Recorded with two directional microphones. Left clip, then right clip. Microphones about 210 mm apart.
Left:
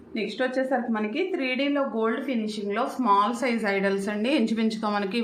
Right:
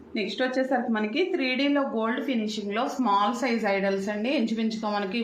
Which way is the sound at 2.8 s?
15° left (ahead or behind).